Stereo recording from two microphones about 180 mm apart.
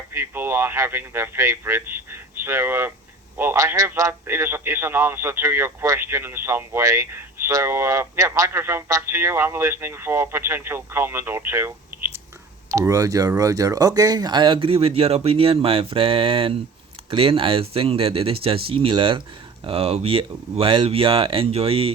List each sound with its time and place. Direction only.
0.1 s a man's voice: 15° right (ahead or behind); by 21.9 s 30° right (ahead or behind)